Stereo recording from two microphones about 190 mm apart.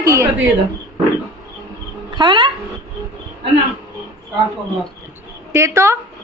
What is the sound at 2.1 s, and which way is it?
Speech, 25° right (ahead or behind).